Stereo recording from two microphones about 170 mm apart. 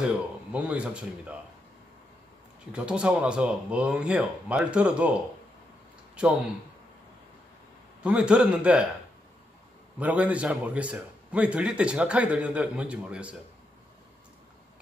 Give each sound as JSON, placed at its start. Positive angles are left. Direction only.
{"t": 0.0, "sound": "a man's voice", "side_deg": -5}
{"t": 2.7, "sound": "a man's voice", "side_deg": -5}
{"t": 6.1, "sound": "a man's voice", "side_deg": -5}
{"t": 8.0, "sound": "a man's voice", "side_deg": -5}
{"t": 9.9, "sound": "a man's voice", "side_deg": -10}